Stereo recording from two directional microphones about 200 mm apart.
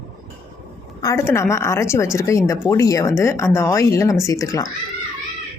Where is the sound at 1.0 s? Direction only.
15° left (ahead or behind).